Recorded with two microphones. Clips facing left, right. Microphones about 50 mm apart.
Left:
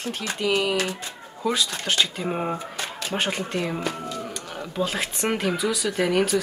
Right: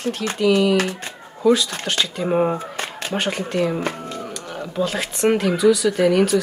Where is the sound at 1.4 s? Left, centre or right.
Centre.